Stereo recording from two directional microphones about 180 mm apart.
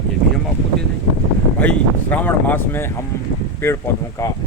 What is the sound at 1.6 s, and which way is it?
Speech, 10° left (ahead or behind).